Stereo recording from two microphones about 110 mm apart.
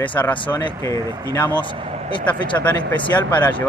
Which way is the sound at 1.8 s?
70° right (ahead or behind).